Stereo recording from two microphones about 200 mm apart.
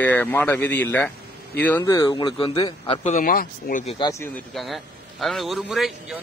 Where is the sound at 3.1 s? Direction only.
45° left (ahead or behind).